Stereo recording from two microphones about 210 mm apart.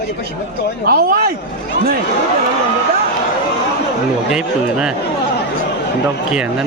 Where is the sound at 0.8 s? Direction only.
45° right (ahead or behind).